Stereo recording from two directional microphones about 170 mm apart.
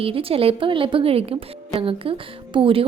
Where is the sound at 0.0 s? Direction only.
35° right (ahead or behind).